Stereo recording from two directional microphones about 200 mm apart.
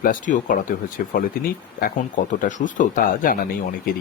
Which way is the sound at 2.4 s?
40° left (ahead or behind).